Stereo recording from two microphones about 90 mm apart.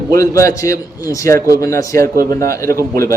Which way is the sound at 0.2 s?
35° left (ahead or behind).